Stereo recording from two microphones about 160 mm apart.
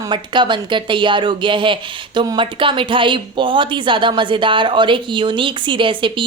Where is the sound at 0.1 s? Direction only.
30° right (ahead or behind).